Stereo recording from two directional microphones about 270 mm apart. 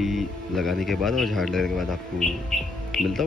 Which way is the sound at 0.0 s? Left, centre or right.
Centre.